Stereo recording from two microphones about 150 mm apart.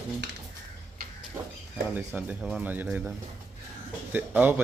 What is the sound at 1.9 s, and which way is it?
A man's voice, 10° right (ahead or behind).